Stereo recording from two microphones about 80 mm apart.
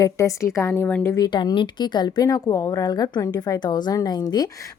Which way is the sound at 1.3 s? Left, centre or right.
Left.